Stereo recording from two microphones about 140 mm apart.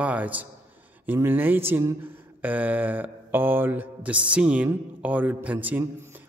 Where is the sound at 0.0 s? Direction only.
10° right (ahead or behind).